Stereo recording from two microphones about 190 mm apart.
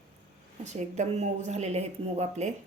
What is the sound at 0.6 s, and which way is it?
Speech, 35° right (ahead or behind).